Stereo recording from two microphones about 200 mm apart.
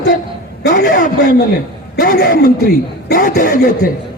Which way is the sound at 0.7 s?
40° left (ahead or behind).